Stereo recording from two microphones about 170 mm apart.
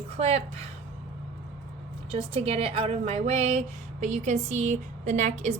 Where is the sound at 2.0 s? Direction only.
35° right (ahead or behind).